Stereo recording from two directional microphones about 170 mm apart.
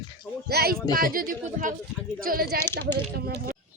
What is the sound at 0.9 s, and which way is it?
Speech, 60° right (ahead or behind).